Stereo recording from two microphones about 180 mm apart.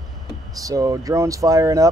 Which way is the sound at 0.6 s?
20° right (ahead or behind).